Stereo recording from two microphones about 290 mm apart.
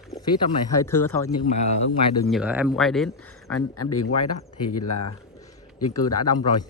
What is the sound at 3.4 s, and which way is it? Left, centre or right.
Speech, left.